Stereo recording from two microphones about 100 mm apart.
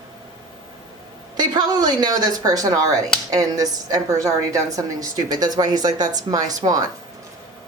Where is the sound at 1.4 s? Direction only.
40° right (ahead or behind).